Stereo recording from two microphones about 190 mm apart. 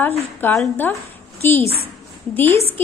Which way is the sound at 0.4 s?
10° left (ahead or behind).